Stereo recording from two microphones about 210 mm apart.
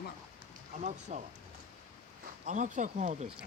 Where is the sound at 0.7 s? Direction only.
35° right (ahead or behind).